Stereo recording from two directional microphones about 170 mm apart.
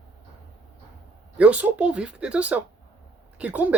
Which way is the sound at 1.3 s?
10° right (ahead or behind).